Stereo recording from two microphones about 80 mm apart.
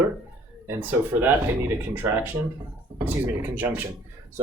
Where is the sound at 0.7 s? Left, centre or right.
Right.